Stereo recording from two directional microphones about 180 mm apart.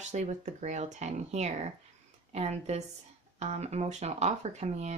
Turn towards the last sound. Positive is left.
turn(degrees=-35)  # may be behind; listen again after turning